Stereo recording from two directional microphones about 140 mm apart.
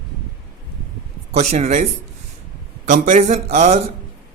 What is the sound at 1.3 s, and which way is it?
Speech, 50° right (ahead or behind).